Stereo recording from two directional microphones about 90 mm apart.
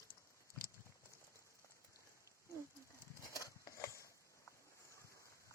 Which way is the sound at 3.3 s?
40° left (ahead or behind).